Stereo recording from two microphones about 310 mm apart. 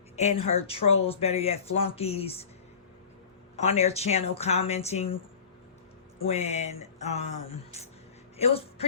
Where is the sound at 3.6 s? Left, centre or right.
Centre.